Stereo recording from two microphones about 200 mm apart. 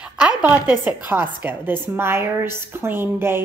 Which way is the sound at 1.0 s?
10° right (ahead or behind).